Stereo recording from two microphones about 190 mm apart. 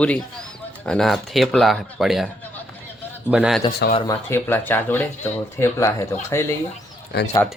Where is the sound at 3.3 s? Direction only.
5° right (ahead or behind).